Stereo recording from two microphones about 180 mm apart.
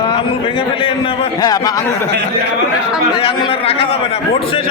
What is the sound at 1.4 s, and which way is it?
Speech, 20° left (ahead or behind).